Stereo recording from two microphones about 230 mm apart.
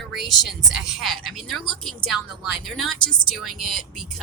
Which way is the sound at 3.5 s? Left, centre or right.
Right.